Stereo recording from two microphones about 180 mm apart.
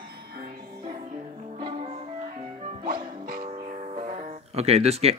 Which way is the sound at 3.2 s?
50° right (ahead or behind).